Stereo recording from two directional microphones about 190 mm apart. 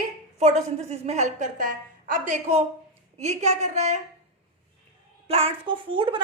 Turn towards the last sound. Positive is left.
turn(degrees=-25)  # may be behind; listen again after turning